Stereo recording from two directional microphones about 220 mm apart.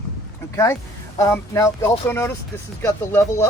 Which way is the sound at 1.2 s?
15° left (ahead or behind).